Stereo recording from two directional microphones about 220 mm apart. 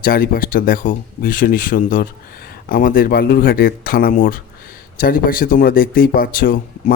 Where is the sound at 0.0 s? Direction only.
40° left (ahead or behind).